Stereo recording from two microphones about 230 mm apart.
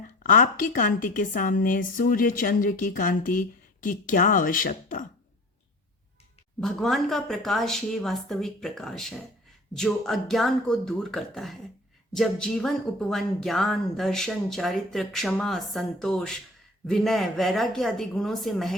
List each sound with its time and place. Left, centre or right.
0.2 s a woman's voice: left
6.6 s speech: centre